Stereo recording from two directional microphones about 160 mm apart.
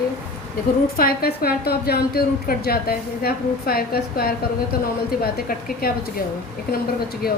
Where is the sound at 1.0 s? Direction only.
70° left (ahead or behind).